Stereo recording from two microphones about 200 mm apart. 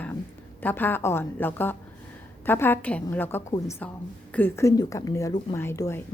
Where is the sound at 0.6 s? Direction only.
10° left (ahead or behind).